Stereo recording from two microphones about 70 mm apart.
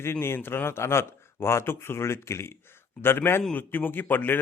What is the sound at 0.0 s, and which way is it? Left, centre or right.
A man's voice, left.